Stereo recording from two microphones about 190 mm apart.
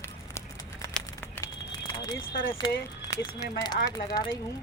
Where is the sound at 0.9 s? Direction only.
10° left (ahead or behind).